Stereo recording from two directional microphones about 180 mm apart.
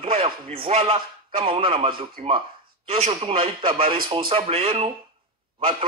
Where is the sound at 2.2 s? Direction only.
40° right (ahead or behind).